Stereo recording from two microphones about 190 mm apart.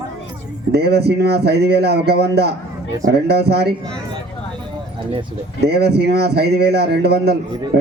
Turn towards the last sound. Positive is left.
turn(degrees=-60)  # may be behind; listen again after turning